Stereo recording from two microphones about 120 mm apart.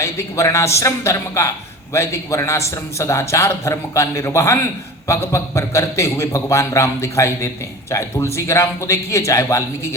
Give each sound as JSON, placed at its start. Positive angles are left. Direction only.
{"t": 0.0, "sound": "a man's voice", "side_deg": 25}